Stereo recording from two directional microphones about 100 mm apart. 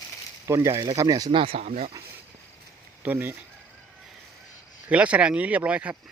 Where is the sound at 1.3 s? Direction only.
65° right (ahead or behind); by 1.9 s 85° right.